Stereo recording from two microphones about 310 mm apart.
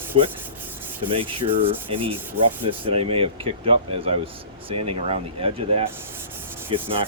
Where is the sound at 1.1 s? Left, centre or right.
Centre.